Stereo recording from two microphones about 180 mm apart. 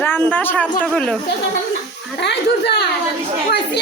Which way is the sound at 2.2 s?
70° left (ahead or behind).